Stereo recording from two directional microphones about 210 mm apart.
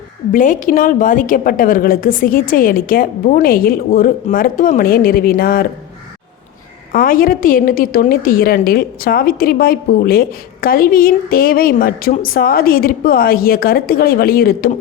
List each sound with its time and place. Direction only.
0.3 s a woman's voice: 40° left (ahead or behind)
6.9 s a woman's voice: 40° left (ahead or behind)